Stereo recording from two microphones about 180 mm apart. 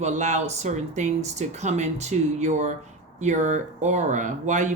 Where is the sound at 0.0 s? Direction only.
40° right (ahead or behind).